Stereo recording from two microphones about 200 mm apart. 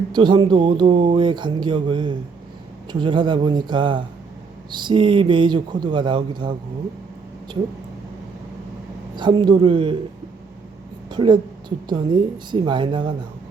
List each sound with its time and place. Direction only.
0.1 s speech: 25° right (ahead or behind)
9.1 s speech: 20° right (ahead or behind)
11.1 s a woman's voice: 25° right (ahead or behind)